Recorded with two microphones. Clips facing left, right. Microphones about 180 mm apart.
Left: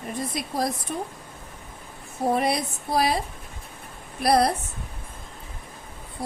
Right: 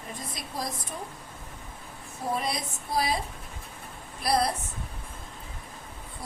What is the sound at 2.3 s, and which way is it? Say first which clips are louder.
Speech: left 6 dB; 65° left (ahead or behind).